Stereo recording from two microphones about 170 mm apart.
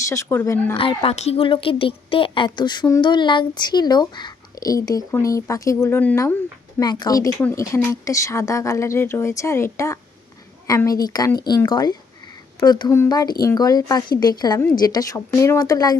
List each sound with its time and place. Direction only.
0.0 s speech: 15° left (ahead or behind)
0.8 s a woman's voice: 35° left (ahead or behind)